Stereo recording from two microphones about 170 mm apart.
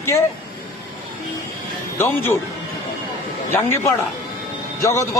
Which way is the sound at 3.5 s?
15° left (ahead or behind).